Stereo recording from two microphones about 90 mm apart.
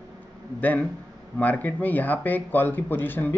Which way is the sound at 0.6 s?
15° left (ahead or behind).